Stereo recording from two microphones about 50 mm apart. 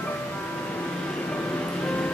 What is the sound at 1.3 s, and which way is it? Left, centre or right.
Music, left.